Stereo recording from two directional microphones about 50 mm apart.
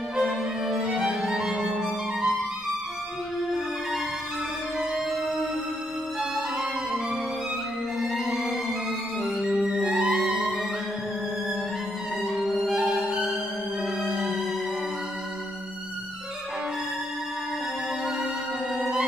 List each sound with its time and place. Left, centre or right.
0.1 s music: centre
6.3 s music: centre
8.0 s music: centre
9.7 s music: centre
12.3 s music: centre
18.8 s music: centre